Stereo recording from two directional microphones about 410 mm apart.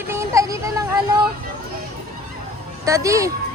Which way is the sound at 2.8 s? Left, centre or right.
Centre.